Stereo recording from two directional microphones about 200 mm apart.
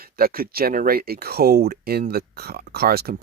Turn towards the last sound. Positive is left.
turn(degrees=-50)  # may be behind; listen again after turning